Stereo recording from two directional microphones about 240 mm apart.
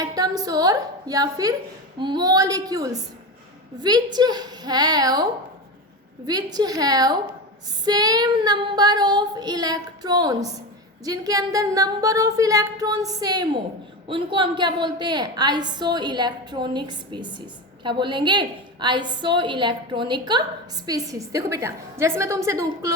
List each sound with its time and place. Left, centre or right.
0.0 s a woman's voice: centre